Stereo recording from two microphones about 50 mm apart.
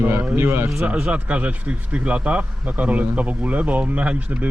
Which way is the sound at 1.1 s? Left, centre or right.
Right.